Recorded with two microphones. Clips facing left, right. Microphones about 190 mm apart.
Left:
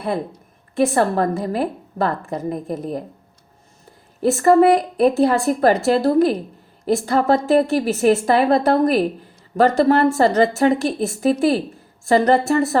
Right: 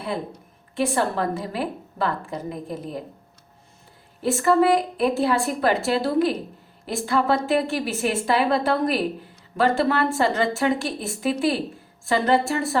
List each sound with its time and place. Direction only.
0.8 s a woman's voice: 45° left (ahead or behind)
4.2 s a woman's voice: 45° left (ahead or behind)